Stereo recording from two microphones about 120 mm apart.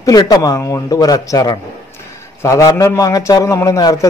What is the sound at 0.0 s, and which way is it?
A man's voice, 30° left (ahead or behind).